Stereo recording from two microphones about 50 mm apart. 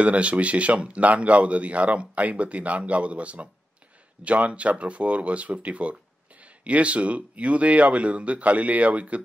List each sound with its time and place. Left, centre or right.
0.0 s a man's voice: right